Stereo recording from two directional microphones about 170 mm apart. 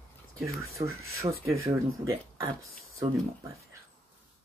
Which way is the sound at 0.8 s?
15° right (ahead or behind).